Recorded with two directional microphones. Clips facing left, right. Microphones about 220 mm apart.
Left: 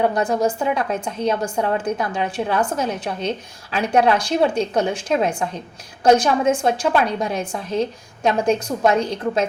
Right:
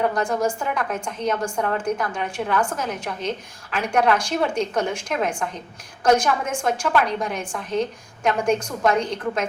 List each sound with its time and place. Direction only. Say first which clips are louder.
0.0 s a woman's voice: left 3 dB; 25° left (ahead or behind)
1.8 s a woman's voice: left 2 dB; 35° left (ahead or behind)
2.6 s a woman's voice: left 3 dB; 20° left (ahead or behind)
2.8 s a woman's voice: left 3 dB; 35° left (ahead or behind)